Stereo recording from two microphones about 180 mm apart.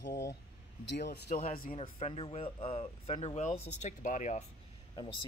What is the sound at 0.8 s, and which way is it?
Speech, 70° left (ahead or behind).